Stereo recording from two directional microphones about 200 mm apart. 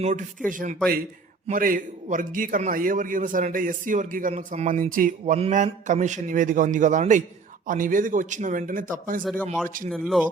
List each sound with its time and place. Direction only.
0.0 s a man's voice: 35° right (ahead or behind)
9.4 s speech: 10° left (ahead or behind)
9.6 s speech: 40° right (ahead or behind)
9.9 s speech: centre (ahead or behind)